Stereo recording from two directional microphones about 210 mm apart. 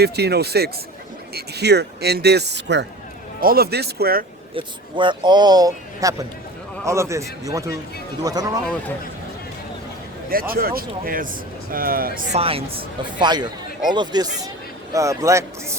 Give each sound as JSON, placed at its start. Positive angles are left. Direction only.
{"t": 0.0, "sound": "speech", "side_deg": -50}
{"t": 4.5, "sound": "a man's voice", "side_deg": -25}
{"t": 10.2, "sound": "speech", "side_deg": -45}
{"t": 12.4, "sound": "a man's voice", "side_deg": -25}